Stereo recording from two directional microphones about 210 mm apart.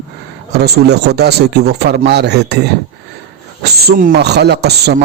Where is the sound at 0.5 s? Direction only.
50° right (ahead or behind).